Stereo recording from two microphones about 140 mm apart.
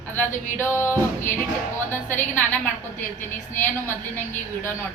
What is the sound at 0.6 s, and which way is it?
A woman's voice, 15° left (ahead or behind).